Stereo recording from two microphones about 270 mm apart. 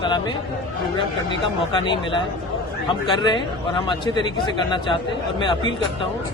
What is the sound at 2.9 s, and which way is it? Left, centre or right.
A man's voice, centre.